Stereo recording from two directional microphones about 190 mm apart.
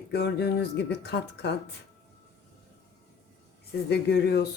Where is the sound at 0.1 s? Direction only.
60° left (ahead or behind).